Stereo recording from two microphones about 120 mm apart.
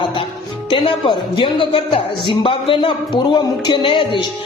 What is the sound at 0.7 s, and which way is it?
A woman's voice, 45° left (ahead or behind).